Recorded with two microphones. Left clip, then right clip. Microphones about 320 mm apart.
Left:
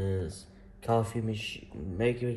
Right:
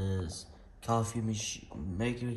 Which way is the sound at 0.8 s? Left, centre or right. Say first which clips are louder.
Left 4 dB; centre.